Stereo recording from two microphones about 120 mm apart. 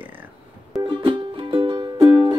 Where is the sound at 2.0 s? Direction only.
50° right (ahead or behind).